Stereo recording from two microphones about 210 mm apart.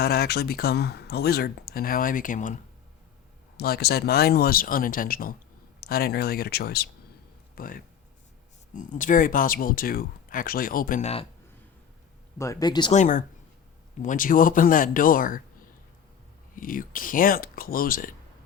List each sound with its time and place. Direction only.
0.0 s speech: 45° left (ahead or behind)
3.6 s speech: 50° left (ahead or behind); by 11.3 s 30° left (ahead or behind)
12.4 s speech: 15° left (ahead or behind)
12.9 s speech: 35° left (ahead or behind)
16.6 s speech: 40° left (ahead or behind)